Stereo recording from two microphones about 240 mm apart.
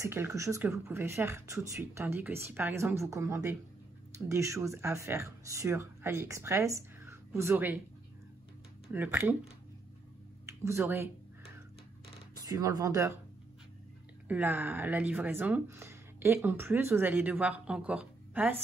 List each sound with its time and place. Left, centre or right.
0.0 s speech: centre
8.8 s speech: centre
12.4 s speech: centre
14.2 s speech: centre